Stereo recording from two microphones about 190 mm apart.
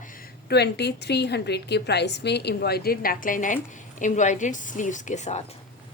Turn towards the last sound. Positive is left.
turn(degrees=35)  # may be behind; listen again after turning